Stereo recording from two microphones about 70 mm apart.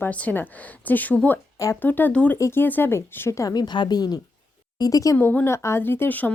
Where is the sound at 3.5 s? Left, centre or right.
Left.